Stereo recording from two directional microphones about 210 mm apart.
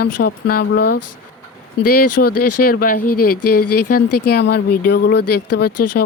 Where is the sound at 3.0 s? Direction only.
90° left.